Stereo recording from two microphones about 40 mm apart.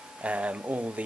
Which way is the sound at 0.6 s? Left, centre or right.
Right.